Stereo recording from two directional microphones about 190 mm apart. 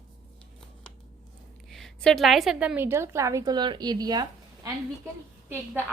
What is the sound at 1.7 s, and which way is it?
A woman's voice, centre (ahead or behind).